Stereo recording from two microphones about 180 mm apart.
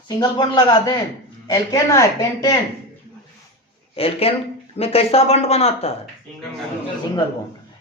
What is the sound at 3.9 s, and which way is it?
Speech, 35° left (ahead or behind).